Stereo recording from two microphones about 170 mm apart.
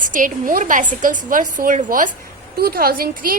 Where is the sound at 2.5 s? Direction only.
60° right (ahead or behind).